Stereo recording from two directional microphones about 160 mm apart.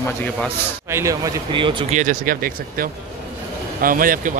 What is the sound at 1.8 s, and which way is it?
Speech, 50° right (ahead or behind).